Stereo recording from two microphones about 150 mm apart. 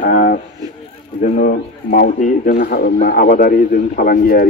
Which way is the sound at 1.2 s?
65° left (ahead or behind).